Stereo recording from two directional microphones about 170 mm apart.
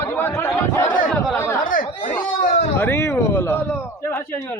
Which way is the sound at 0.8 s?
50° left (ahead or behind).